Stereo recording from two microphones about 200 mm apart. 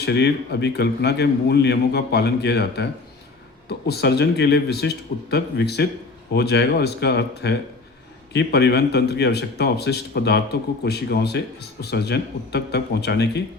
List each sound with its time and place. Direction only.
0.0 s a man's voice: 55° left (ahead or behind)